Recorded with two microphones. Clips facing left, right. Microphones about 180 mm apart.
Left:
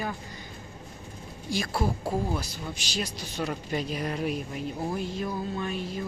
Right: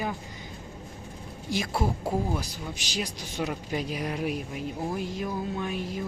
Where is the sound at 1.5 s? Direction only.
20° right (ahead or behind).